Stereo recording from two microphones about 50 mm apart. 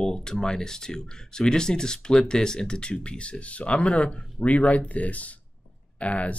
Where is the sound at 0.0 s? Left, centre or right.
Centre.